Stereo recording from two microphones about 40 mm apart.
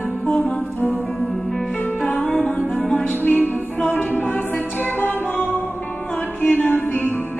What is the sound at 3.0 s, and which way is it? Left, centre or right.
Music, left.